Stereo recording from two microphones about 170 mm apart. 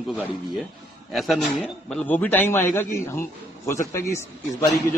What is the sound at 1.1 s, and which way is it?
Speech, centre (ahead or behind).